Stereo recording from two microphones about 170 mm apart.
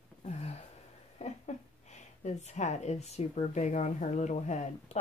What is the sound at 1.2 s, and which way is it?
Speech, 40° left (ahead or behind).